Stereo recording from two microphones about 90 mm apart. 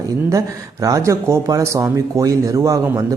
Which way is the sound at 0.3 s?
35° right (ahead or behind).